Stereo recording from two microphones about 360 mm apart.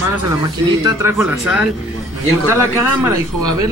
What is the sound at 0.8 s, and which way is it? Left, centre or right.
Speech, centre.